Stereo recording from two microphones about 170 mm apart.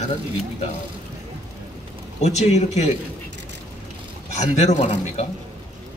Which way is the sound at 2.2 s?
40° left (ahead or behind).